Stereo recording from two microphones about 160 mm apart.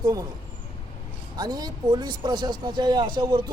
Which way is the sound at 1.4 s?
25° right (ahead or behind).